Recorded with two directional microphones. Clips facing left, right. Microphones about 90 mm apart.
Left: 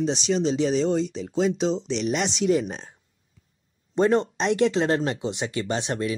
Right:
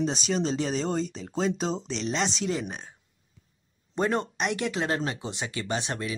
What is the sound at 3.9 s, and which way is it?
Speech, 25° left (ahead or behind).